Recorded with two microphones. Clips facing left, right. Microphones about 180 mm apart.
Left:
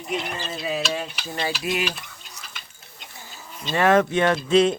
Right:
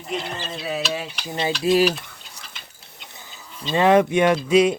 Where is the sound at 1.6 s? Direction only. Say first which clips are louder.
Right 13 dB; 30° right (ahead or behind).